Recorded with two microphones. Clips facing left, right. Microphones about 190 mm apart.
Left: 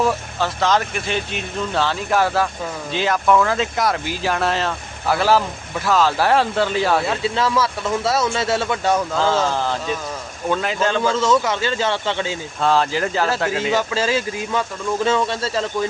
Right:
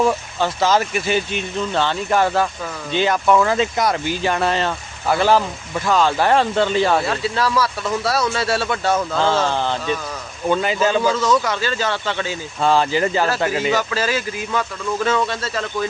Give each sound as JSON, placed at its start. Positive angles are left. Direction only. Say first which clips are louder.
{"t": 0.0, "sound": "speech", "louder": "right 2 dB", "side_deg": 0}
{"t": 7.3, "sound": "a man's voice", "louder": "right 1 dB", "side_deg": 20}
{"t": 9.1, "sound": "speech", "louder": "even", "side_deg": 0}
{"t": 11.2, "sound": "a man's voice", "louder": "left 1 dB", "side_deg": 25}
{"t": 12.5, "sound": "speech", "louder": "right 2 dB", "side_deg": 0}
{"t": 13.7, "sound": "a man's voice", "louder": "left 1 dB", "side_deg": 25}